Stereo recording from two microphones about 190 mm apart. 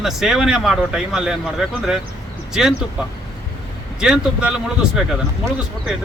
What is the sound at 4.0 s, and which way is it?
Speech, 5° right (ahead or behind).